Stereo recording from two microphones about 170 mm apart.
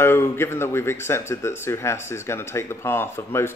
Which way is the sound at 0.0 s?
15° left (ahead or behind).